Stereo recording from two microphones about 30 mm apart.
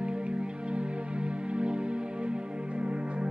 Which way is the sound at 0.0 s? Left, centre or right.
Right.